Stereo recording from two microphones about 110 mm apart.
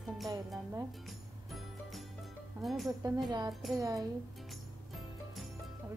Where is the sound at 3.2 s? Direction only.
35° right (ahead or behind).